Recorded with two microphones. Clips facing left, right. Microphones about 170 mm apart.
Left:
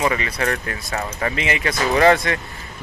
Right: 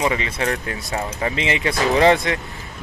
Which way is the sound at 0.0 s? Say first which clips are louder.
Even; 20° right (ahead or behind).